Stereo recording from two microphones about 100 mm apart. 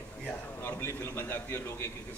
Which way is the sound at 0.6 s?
25° left (ahead or behind).